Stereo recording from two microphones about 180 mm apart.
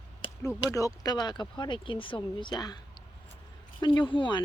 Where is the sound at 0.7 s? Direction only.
20° left (ahead or behind).